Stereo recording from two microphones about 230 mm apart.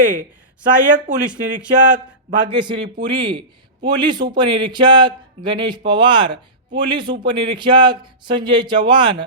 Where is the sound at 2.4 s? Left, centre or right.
Right.